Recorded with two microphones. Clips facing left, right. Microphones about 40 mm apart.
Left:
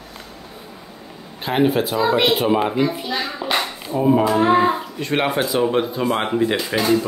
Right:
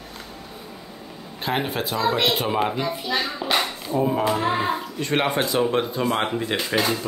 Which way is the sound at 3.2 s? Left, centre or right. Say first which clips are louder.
Left 2 dB; centre.